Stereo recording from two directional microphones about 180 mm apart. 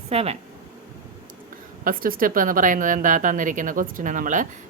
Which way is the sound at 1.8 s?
50° right (ahead or behind).